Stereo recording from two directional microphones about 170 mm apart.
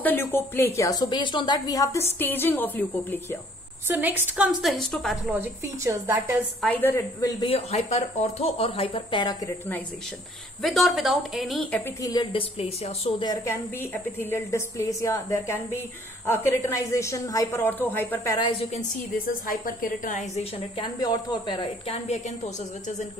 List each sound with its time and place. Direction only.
0.0 s a woman's voice: 10° left (ahead or behind)
3.8 s a woman's voice: 15° right (ahead or behind)
5.3 s a woman's voice: 15° right (ahead or behind)
6.6 s speech: 10° left (ahead or behind)
10.6 s a woman's voice: centre (ahead or behind)
12.0 s a woman's voice: 25° left (ahead or behind)
13.2 s a woman's voice: 20° left (ahead or behind)
18.6 s a woman's voice: 40° left (ahead or behind)
19.2 s a woman's voice: 55° left (ahead or behind)
20.5 s a woman's voice: 30° left (ahead or behind)